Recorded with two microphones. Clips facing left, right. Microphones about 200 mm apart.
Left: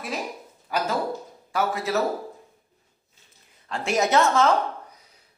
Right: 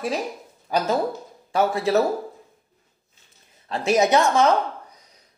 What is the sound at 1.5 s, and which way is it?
Speech, 30° right (ahead or behind).